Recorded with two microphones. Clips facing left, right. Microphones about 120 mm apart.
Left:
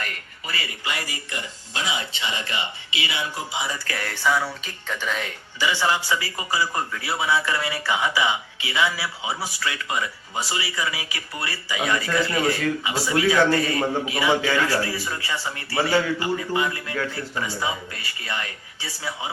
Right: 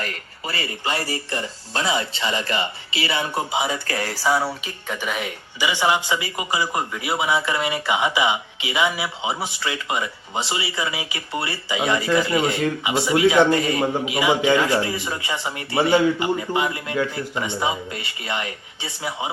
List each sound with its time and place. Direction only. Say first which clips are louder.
0.0 s speech: right 4 dB; 35° right (ahead or behind)
3.1 s speech: right 7 dB; 50° right (ahead or behind)
3.8 s speech: right 2 dB; 35° right (ahead or behind)
4.6 s speech: right 2 dB; 10° right (ahead or behind)